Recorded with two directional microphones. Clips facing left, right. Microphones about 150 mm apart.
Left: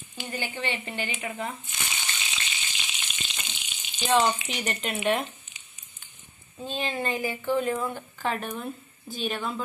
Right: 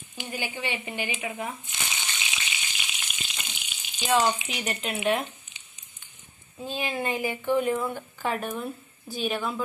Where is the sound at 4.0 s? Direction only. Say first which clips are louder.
Left 1 dB; 10° right (ahead or behind).